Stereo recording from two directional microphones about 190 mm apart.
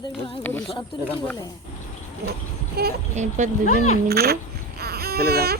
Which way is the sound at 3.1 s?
40° right (ahead or behind).